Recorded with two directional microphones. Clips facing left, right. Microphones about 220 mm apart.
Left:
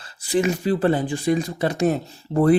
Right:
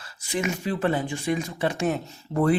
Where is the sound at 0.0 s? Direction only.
35° left (ahead or behind).